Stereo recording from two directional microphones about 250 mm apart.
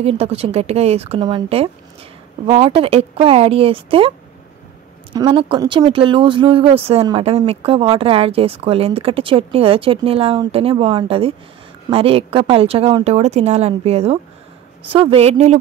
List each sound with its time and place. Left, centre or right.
0.0 s speech: right
5.1 s speech: centre